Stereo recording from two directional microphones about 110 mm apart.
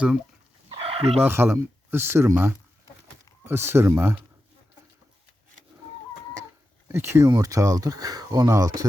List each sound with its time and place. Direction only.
0.7 s chicken: 60° right (ahead or behind)
1.2 s speech: 20° right (ahead or behind)
6.8 s speech: 25° right (ahead or behind)
7.3 s speech: 35° right (ahead or behind)